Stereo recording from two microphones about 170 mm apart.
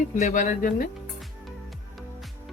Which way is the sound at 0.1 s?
45° left (ahead or behind).